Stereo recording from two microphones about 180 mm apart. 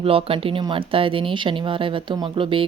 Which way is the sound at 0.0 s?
30° right (ahead or behind).